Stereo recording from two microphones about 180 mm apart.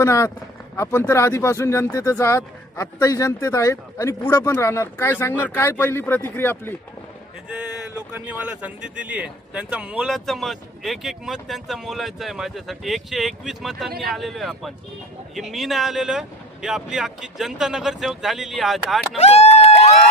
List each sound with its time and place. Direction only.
0.0 s speech: 15° left (ahead or behind)
8.1 s a man's voice: 10° right (ahead or behind)
19.1 s a sound: 35° left (ahead or behind)